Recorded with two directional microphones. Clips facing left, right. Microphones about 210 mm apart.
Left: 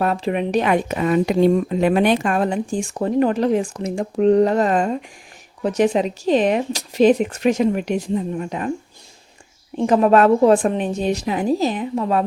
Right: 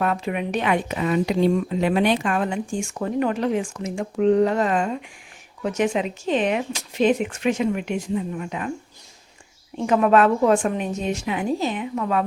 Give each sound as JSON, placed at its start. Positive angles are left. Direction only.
{"t": 0.0, "sound": "speech", "side_deg": 35}
{"t": 9.8, "sound": "speech", "side_deg": 35}